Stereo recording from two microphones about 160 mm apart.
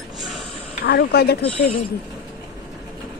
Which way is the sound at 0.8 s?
85° left.